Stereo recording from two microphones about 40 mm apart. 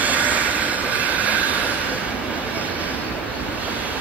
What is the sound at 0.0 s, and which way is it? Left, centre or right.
Train, right.